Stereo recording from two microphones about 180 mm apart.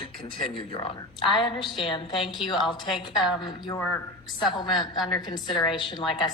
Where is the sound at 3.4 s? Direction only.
25° left (ahead or behind).